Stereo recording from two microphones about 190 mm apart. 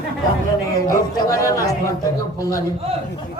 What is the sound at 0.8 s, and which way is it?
Speech, 15° left (ahead or behind).